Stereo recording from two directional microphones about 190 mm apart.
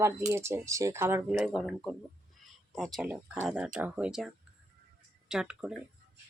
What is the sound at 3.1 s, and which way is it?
Speech, 5° right (ahead or behind).